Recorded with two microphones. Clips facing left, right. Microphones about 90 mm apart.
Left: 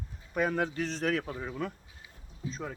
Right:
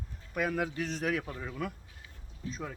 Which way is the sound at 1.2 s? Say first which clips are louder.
Left 2 dB; 15° left (ahead or behind).